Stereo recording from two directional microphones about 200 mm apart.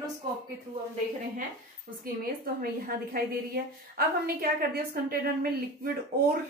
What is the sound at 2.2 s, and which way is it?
A woman's voice, 45° right (ahead or behind).